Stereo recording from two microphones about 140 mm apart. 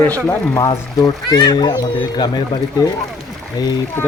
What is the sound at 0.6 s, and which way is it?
Speech, 30° left (ahead or behind).